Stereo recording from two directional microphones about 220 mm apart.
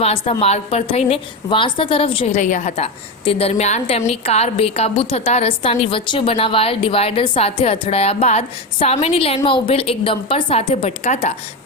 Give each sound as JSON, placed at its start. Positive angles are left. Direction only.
{"t": 0.0, "sound": "a woman's voice", "side_deg": 25}